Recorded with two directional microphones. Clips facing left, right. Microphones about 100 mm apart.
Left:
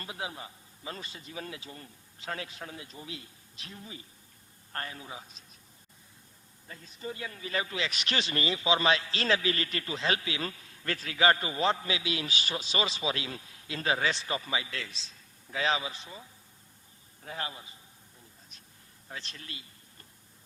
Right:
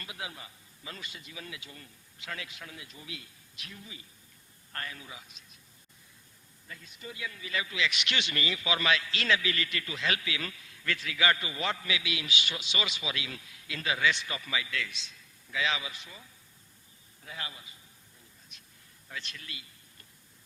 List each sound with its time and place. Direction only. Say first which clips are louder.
0.0 s speech: left 4 dB; 30° left (ahead or behind)
6.7 s speech: left 5 dB; 35° left (ahead or behind)
17.2 s speech: left 4 dB; 40° left (ahead or behind)
18.5 s a sound: left 1 dB; 35° left (ahead or behind)
19.0 s speech: even; 35° left (ahead or behind)